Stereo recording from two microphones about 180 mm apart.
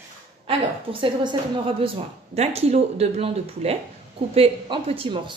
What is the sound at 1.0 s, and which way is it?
A woman's voice, 25° right (ahead or behind).